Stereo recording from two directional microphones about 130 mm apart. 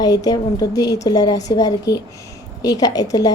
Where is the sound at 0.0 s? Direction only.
30° left (ahead or behind).